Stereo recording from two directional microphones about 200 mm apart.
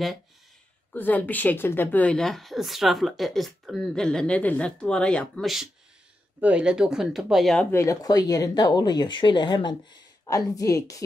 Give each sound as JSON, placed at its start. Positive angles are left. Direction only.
{"t": 0.9, "sound": "a woman's voice", "side_deg": 10}
{"t": 7.7, "sound": "speech", "side_deg": 15}